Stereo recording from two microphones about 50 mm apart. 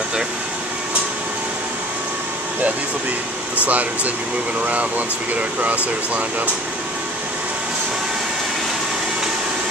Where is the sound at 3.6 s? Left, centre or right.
Right.